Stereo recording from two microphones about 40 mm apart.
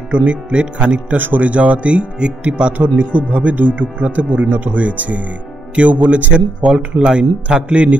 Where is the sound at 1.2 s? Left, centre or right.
Right.